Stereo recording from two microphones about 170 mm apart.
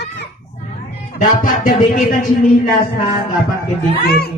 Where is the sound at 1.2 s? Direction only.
55° left (ahead or behind).